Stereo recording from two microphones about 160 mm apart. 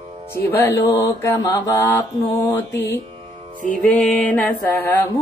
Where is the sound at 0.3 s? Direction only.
15° left (ahead or behind).